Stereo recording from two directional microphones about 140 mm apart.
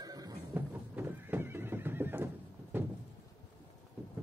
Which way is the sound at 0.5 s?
15° right (ahead or behind).